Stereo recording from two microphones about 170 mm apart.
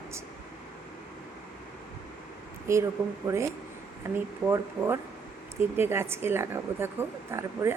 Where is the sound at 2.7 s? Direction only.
15° right (ahead or behind).